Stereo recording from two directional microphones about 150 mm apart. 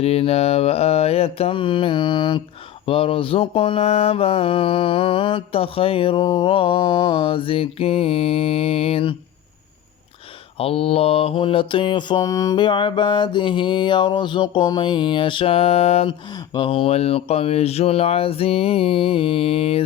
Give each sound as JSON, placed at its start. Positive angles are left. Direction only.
{"t": 0.0, "sound": "mantra", "side_deg": 40}
{"t": 10.6, "sound": "mantra", "side_deg": 40}
{"t": 16.3, "sound": "mantra", "side_deg": 30}